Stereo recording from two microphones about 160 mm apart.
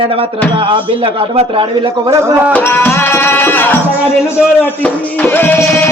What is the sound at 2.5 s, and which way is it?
Music, 15° left (ahead or behind).